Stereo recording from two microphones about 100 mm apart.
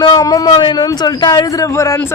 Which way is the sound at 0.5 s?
50° left (ahead or behind).